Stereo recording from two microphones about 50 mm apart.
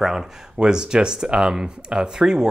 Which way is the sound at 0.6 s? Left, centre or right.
Centre.